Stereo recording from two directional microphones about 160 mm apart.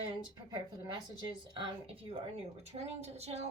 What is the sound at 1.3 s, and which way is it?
Speech, 30° right (ahead or behind).